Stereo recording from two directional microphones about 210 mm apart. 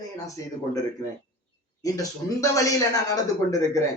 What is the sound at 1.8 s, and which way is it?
Speech, 15° left (ahead or behind).